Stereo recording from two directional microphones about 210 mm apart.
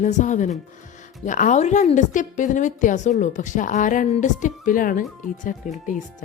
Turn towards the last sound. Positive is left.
turn(degrees=35)  # may be behind; listen again after turning